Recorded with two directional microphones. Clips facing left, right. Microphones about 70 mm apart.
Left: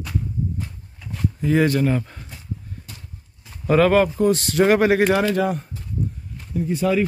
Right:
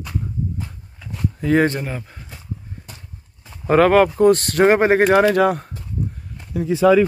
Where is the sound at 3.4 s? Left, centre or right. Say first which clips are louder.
Right 2 dB; right.